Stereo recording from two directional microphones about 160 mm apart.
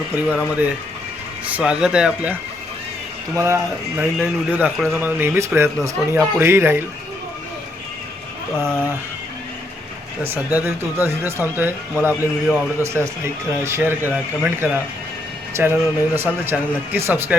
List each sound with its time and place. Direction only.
0.3 s speech: 10° right (ahead or behind)
3.3 s speech: 15° right (ahead or behind)
8.5 s speech: 15° right (ahead or behind)
10.5 s speech: 15° right (ahead or behind)